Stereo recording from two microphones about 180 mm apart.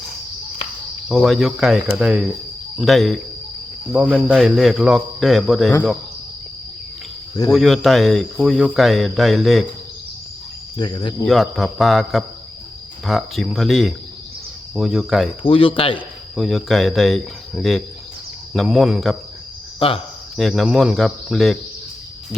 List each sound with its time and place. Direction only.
1.0 s speech: centre (ahead or behind)
4.3 s speech: centre (ahead or behind)
7.5 s speech: centre (ahead or behind)
10.8 s speech: 25° left (ahead or behind)
11.3 s speech: centre (ahead or behind)
15.4 s speech: 30° left (ahead or behind)
16.3 s speech: centre (ahead or behind)
19.8 s speech: 30° left (ahead or behind)
20.3 s speech: centre (ahead or behind)